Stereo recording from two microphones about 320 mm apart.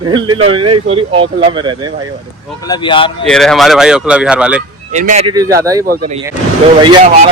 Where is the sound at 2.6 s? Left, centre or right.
Centre.